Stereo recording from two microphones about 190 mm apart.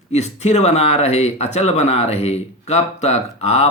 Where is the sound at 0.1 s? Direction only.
35° left (ahead or behind).